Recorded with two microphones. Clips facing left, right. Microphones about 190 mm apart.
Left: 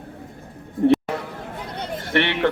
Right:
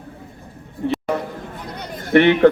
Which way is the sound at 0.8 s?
50° left (ahead or behind).